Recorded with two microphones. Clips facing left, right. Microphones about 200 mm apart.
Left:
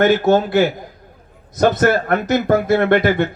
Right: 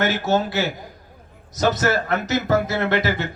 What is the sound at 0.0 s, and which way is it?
Speech, 55° left (ahead or behind).